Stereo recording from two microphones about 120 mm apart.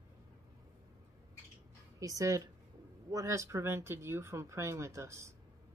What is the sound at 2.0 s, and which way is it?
Speech, 30° right (ahead or behind).